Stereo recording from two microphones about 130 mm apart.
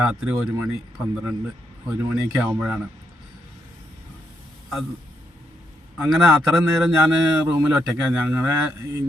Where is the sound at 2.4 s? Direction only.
5° right (ahead or behind).